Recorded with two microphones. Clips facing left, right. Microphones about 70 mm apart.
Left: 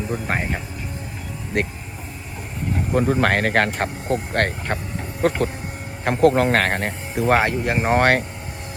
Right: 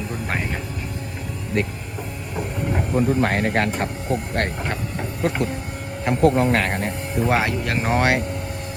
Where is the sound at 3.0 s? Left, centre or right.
Left.